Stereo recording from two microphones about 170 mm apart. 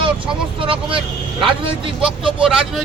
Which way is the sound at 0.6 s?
30° right (ahead or behind).